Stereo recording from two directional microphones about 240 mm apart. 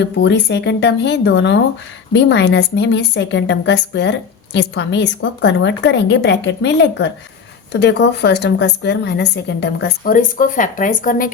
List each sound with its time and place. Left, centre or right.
0.0 s a woman's voice: left